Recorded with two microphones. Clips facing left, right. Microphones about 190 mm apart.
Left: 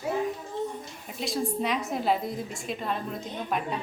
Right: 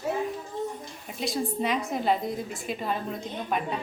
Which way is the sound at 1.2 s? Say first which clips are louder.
Even; centre (ahead or behind).